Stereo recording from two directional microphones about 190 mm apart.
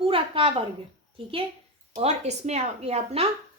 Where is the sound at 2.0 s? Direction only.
35° right (ahead or behind).